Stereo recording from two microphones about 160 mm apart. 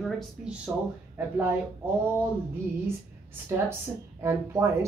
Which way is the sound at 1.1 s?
15° right (ahead or behind).